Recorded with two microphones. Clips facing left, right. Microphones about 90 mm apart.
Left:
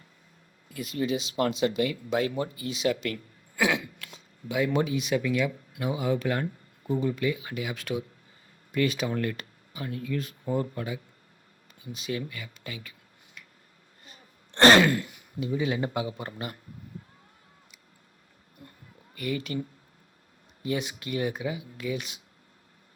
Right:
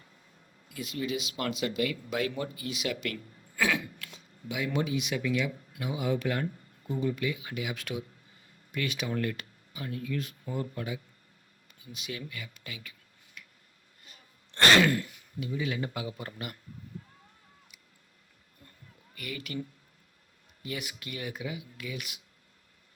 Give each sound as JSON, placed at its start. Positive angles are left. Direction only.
{"t": 0.7, "sound": "speech", "side_deg": 45}
{"t": 3.6, "sound": "throat clearing", "side_deg": 20}
{"t": 4.4, "sound": "speech", "side_deg": 40}
{"t": 11.9, "sound": "speech", "side_deg": 35}
{"t": 13.4, "sound": "a sound", "side_deg": 35}
{"t": 14.0, "sound": "gasp", "side_deg": 30}
{"t": 15.4, "sound": "speech", "side_deg": 30}
{"t": 19.1, "sound": "speech", "side_deg": 30}